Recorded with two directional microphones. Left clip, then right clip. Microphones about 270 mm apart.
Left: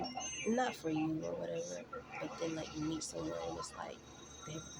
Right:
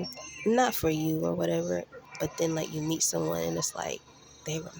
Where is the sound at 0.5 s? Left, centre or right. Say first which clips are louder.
Right 11 dB; right.